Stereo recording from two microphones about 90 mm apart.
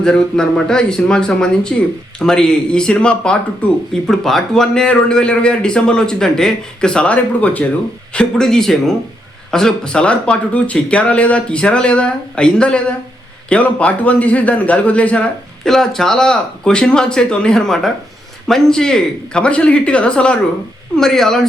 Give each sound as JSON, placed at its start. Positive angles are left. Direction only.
{"t": 0.0, "sound": "speech", "side_deg": 5}
{"t": 4.0, "sound": "speech", "side_deg": 5}